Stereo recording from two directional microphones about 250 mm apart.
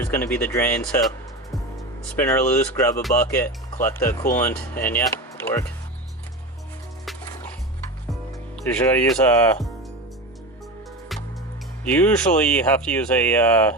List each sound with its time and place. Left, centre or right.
0.0 s speech: centre
2.1 s speech: centre
8.7 s speech: centre
11.1 s music: centre
11.9 s speech: centre